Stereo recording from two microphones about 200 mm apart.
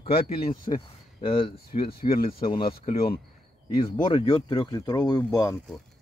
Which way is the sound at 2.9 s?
50° left (ahead or behind).